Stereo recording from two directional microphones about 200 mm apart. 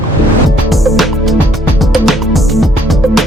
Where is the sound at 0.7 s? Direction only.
Centre (ahead or behind).